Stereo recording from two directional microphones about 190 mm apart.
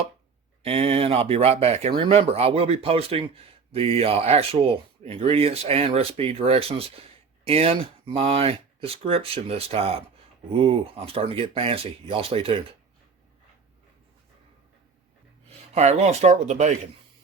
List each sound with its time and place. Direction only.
0.6 s speech: 30° right (ahead or behind)
15.7 s speech: 35° right (ahead or behind)